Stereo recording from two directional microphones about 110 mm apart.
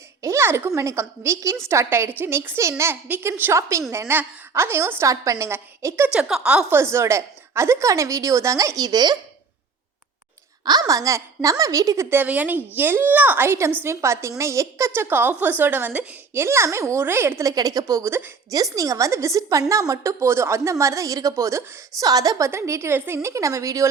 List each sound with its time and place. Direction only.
0.2 s a woman's voice: 25° right (ahead or behind)
6.1 s a woman's voice: 5° right (ahead or behind)
6.9 s a woman's voice: 25° right (ahead or behind)
10.7 s a woman's voice: 35° right (ahead or behind)
12.1 s a woman's voice: 15° right (ahead or behind)